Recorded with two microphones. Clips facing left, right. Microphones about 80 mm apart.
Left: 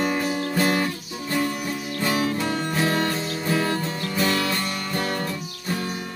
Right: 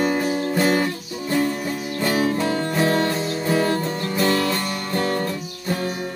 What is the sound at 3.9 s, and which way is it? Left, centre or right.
Music, right.